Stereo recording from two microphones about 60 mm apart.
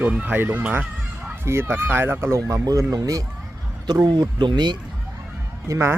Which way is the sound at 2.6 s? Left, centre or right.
Right.